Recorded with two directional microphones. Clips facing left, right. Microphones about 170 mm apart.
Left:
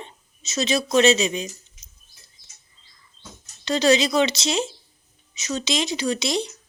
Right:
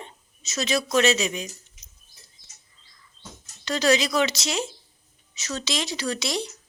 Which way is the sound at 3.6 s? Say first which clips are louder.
Left 3 dB; 25° left (ahead or behind).